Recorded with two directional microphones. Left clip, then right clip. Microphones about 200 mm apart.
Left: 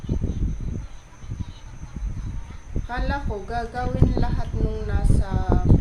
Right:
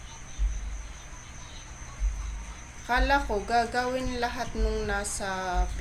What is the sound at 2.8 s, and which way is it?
Speech, 15° right (ahead or behind).